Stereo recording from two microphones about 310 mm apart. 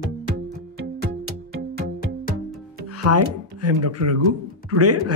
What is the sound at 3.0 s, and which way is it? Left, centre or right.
Speech, right.